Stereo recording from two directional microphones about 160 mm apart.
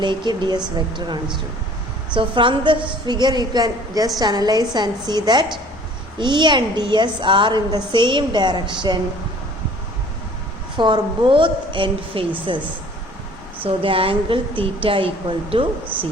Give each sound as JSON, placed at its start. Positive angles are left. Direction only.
{"t": 0.0, "sound": "a woman's voice", "side_deg": -30}
{"t": 10.8, "sound": "a woman's voice", "side_deg": -30}
{"t": 13.7, "sound": "a woman's voice", "side_deg": -35}